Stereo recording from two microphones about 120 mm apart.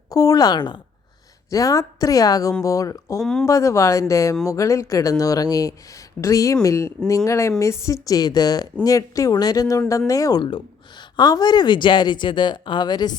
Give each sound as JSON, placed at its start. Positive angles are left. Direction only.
{"t": 0.1, "sound": "speech", "side_deg": 30}
{"t": 1.5, "sound": "speech", "side_deg": 30}
{"t": 3.2, "sound": "speech", "side_deg": 5}
{"t": 3.4, "sound": "speech", "side_deg": 25}